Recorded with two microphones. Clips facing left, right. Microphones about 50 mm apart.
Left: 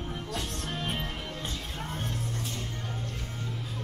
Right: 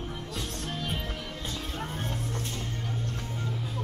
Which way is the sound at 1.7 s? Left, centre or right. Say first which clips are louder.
Right 1 dB; centre.